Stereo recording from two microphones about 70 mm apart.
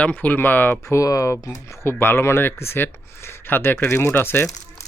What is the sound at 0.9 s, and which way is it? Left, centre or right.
Speech, left.